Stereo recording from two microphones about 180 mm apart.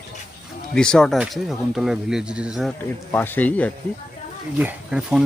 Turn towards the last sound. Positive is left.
turn(degrees=-5)  # may be behind; listen again after turning